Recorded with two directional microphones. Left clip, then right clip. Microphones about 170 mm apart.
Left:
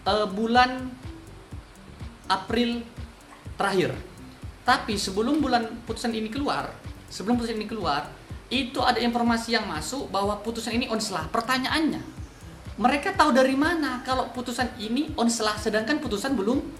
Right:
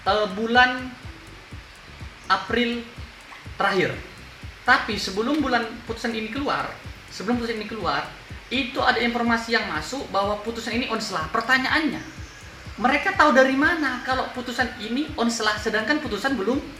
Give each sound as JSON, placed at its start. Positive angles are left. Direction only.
{"t": 0.0, "sound": "a woman's voice", "side_deg": 30}
{"t": 2.2, "sound": "a woman's voice", "side_deg": 30}
{"t": 5.2, "sound": "a woman's voice", "side_deg": 30}
{"t": 12.8, "sound": "a woman's voice", "side_deg": 30}